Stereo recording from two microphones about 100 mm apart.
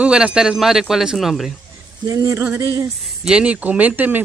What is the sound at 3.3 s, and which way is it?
Speech, 10° right (ahead or behind).